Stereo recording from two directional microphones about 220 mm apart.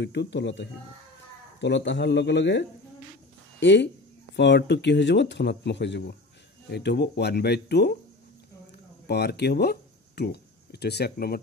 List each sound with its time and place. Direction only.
0.0 s speech: 50° left (ahead or behind)
9.0 s speech: 50° left (ahead or behind)